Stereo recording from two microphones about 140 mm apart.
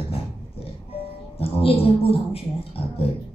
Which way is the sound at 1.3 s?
45° left (ahead or behind).